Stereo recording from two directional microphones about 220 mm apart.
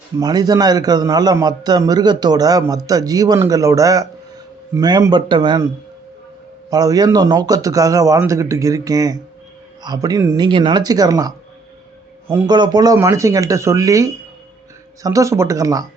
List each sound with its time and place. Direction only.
0.2 s a man's voice: 15° right (ahead or behind)
6.7 s a man's voice: 15° right (ahead or behind)
12.3 s a man's voice: 15° right (ahead or behind)